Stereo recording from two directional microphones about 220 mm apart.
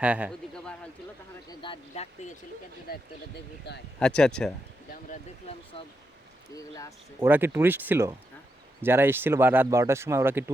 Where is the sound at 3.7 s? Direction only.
50° left (ahead or behind).